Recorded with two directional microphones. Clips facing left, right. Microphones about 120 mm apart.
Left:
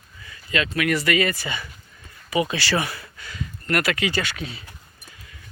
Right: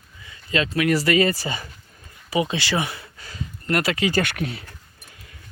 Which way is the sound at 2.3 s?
25° right (ahead or behind).